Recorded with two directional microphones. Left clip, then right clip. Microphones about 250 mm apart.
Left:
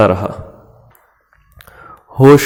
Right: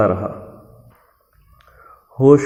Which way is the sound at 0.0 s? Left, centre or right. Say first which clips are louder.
Left 5 dB; left.